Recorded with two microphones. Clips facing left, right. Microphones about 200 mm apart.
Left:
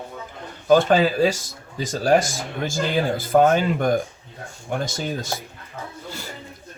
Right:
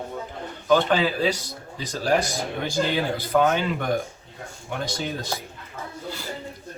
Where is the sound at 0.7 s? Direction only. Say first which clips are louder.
Left 4 dB; 45° left (ahead or behind).